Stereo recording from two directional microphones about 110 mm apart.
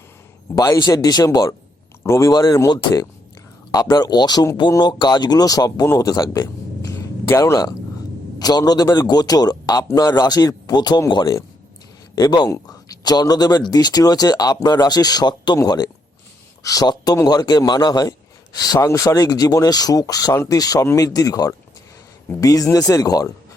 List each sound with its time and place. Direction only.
0.5 s speech: 35° left (ahead or behind)